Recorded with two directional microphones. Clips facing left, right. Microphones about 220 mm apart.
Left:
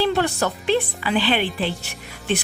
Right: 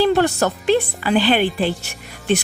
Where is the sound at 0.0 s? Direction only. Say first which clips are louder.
Right 5 dB; 45° right (ahead or behind).